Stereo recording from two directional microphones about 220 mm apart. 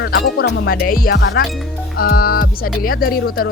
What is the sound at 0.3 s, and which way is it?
Music, 45° left (ahead or behind).